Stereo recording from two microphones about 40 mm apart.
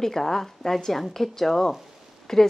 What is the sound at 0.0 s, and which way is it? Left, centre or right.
A woman's voice, centre.